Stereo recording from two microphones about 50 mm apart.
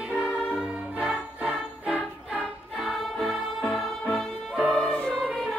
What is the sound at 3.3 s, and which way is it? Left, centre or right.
Music, centre.